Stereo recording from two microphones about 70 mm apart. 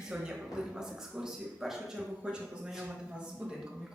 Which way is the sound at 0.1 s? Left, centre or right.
Centre.